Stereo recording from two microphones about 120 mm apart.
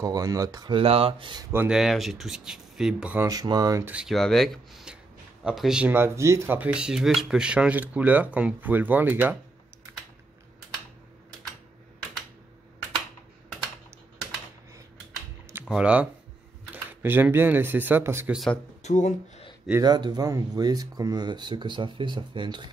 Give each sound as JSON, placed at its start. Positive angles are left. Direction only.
{"t": 0.0, "sound": "speech", "side_deg": -30}
{"t": 0.7, "sound": "speech", "side_deg": -50}
{"t": 1.7, "sound": "speech", "side_deg": -5}
{"t": 3.2, "sound": "speech", "side_deg": -30}
{"t": 3.8, "sound": "speech", "side_deg": -10}
{"t": 4.1, "sound": "speech", "side_deg": 5}
{"t": 5.9, "sound": "speech", "side_deg": -20}
{"t": 15.7, "sound": "speech", "side_deg": -10}
{"t": 18.8, "sound": "speech", "side_deg": 80}
{"t": 19.8, "sound": "speech", "side_deg": -35}